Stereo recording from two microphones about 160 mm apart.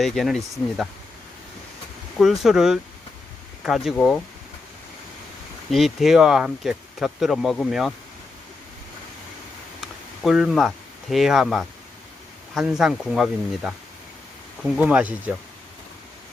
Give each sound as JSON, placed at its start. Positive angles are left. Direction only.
{"t": 0.0, "sound": "speech", "side_deg": 0}
{"t": 2.1, "sound": "speech", "side_deg": 0}
{"t": 5.7, "sound": "speech", "side_deg": 0}
{"t": 9.8, "sound": "a sound", "side_deg": -5}
{"t": 11.1, "sound": "speech", "side_deg": 0}